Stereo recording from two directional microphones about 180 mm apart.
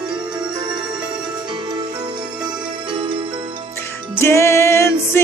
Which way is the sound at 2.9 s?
30° right (ahead or behind).